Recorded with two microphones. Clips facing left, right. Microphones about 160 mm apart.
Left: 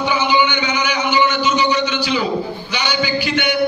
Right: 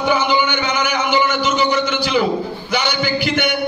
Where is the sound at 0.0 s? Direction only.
55° right (ahead or behind).